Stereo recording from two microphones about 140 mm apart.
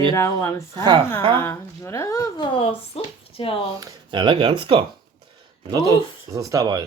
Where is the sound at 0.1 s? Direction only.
20° left (ahead or behind).